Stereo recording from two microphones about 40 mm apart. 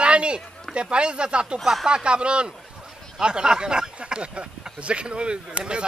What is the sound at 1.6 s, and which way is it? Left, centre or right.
Speech, centre.